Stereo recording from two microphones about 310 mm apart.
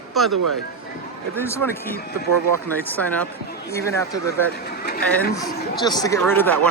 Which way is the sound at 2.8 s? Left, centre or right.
Centre.